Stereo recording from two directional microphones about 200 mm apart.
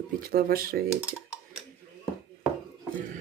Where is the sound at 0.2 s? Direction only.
50° right (ahead or behind).